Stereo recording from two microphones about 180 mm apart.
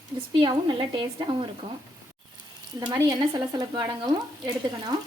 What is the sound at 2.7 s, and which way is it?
Speech, 20° right (ahead or behind).